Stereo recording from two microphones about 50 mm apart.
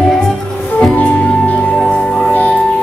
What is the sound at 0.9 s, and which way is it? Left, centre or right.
Music, left.